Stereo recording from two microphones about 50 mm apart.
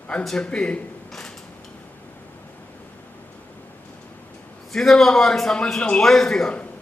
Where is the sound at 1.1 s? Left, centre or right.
Centre.